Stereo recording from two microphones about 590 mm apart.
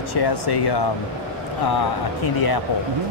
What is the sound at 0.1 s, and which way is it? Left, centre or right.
Speech, left.